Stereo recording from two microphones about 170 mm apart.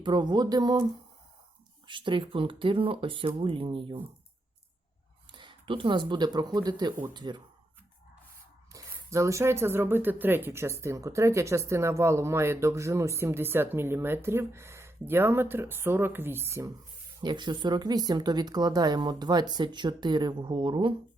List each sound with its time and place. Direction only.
0.0 s speech: 25° right (ahead or behind)
1.9 s speech: 30° right (ahead or behind)
5.3 s a sound: 30° right (ahead or behind)
6.1 s speech: 25° right (ahead or behind)
8.7 s speech: 15° right (ahead or behind)
17.2 s speech: 25° right (ahead or behind)